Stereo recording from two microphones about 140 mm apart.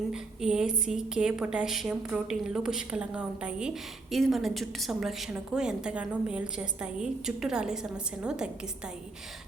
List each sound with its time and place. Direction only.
0.1 s a woman's voice: 5° right (ahead or behind)